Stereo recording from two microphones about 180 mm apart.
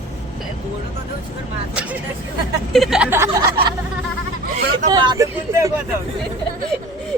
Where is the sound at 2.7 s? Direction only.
Centre (ahead or behind).